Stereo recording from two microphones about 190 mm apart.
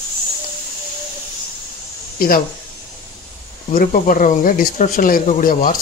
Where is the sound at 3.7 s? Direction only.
45° left (ahead or behind).